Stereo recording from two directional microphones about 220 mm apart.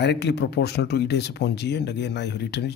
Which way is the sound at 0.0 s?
50° left (ahead or behind).